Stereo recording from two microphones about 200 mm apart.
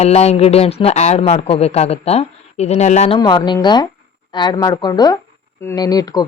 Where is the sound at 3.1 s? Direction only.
20° left (ahead or behind).